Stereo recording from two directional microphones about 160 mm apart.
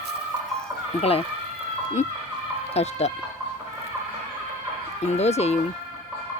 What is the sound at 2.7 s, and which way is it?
Speech, 40° left (ahead or behind).